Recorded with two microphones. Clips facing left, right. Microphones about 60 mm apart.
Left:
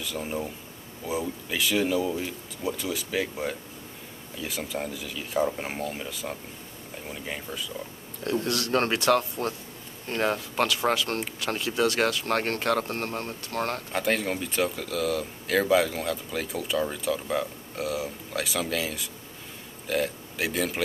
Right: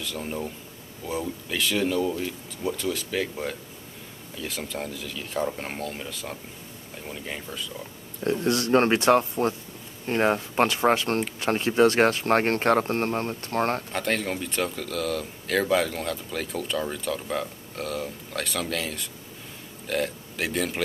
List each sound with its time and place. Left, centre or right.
0.0 s speech: centre
8.2 s speech: right
13.9 s speech: centre